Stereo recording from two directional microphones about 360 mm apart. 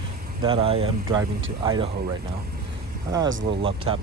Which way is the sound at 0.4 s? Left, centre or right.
Centre.